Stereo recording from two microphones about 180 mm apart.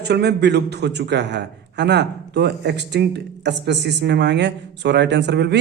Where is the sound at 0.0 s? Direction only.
65° right (ahead or behind).